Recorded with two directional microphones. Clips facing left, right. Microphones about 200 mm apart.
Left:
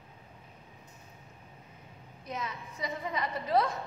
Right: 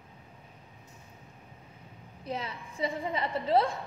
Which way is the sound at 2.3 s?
30° right (ahead or behind).